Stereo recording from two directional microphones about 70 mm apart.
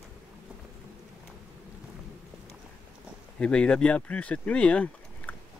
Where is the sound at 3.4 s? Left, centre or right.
Centre.